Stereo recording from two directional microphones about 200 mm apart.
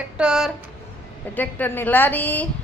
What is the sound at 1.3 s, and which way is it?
A woman's voice, 10° left (ahead or behind).